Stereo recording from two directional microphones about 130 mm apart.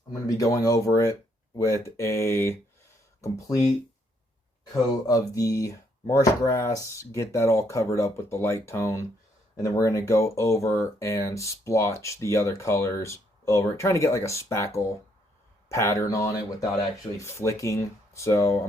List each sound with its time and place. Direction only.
0.3 s speech: 25° left (ahead or behind)
5.0 s speech: 25° left (ahead or behind)